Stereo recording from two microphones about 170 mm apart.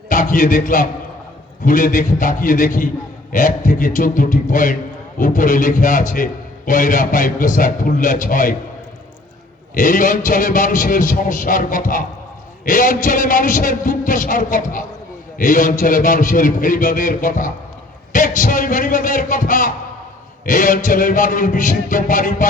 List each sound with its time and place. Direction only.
0.1 s a man's voice: 50° left (ahead or behind)
9.7 s a man's voice: 50° left (ahead or behind)